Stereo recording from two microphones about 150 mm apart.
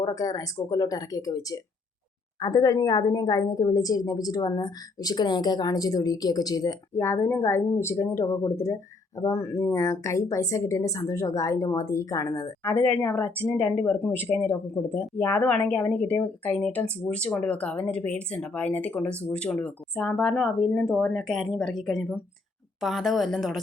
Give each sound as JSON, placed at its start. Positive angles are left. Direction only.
{"t": 0.0, "sound": "a woman's voice", "side_deg": 25}